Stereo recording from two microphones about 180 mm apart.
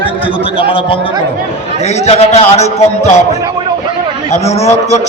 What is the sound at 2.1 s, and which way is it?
Speech, 35° left (ahead or behind).